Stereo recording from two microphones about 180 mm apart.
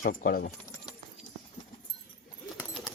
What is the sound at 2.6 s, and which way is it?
Bird, centre (ahead or behind).